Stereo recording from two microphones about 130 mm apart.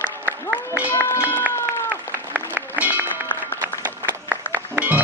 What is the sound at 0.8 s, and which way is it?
Run, 15° left (ahead or behind).